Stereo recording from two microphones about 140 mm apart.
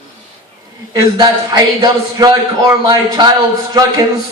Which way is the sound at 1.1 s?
30° right (ahead or behind).